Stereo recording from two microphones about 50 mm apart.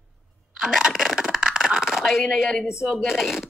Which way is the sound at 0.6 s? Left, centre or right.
Centre.